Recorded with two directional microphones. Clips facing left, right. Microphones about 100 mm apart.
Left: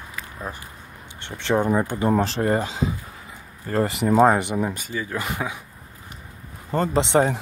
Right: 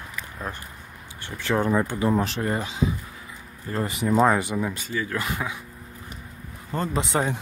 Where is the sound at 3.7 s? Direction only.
50° left (ahead or behind).